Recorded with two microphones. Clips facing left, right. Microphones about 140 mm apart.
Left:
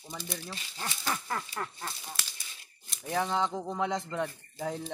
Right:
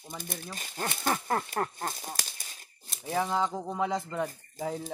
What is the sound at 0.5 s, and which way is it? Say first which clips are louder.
Speech: right 4 dB; 50° right (ahead or behind).